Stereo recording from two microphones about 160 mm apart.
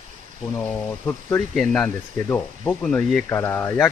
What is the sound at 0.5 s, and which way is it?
Speech, 15° left (ahead or behind).